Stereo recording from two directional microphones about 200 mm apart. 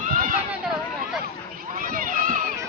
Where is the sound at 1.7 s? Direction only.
45° right (ahead or behind).